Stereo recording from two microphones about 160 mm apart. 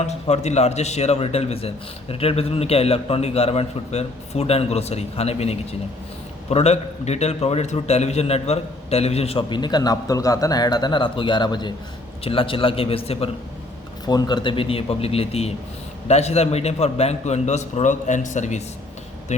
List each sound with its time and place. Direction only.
0.0 s a man's voice: 45° left (ahead or behind)
14.0 s a man's voice: 25° left (ahead or behind); by 19.4 s 45° left (ahead or behind)